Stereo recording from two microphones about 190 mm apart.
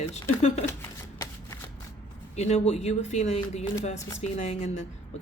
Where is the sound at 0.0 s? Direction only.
35° left (ahead or behind).